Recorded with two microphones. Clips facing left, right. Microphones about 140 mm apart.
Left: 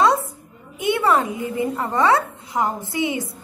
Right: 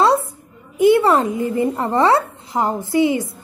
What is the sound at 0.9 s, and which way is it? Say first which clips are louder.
A woman's voice: right 4 dB; 30° right (ahead or behind).